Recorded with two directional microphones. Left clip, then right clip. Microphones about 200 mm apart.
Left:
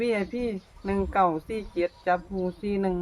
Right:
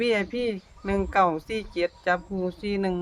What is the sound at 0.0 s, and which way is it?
Speech, 55° right (ahead or behind).